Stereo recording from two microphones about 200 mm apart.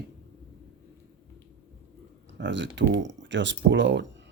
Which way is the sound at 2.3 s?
60° right (ahead or behind).